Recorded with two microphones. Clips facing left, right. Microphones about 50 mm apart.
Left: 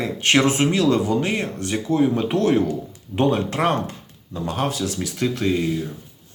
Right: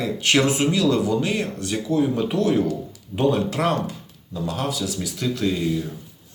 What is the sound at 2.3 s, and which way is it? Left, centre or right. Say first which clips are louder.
A man's voice: left 2 dB; left.